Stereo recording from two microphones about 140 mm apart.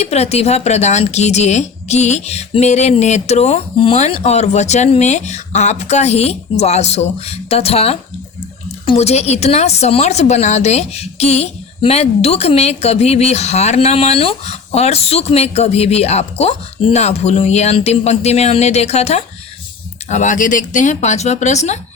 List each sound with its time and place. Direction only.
0.0 s a woman's voice: 50° left (ahead or behind)